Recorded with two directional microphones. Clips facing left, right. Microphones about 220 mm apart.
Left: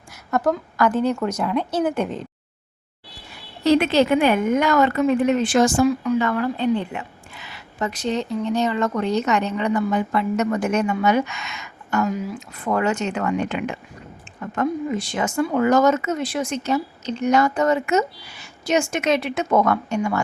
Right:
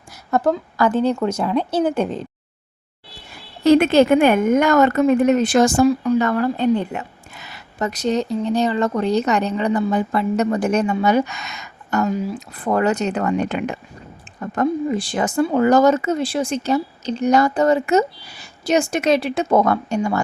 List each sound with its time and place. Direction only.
0.3 s a woman's voice: 30° right (ahead or behind)
3.6 s a woman's voice: 50° right (ahead or behind)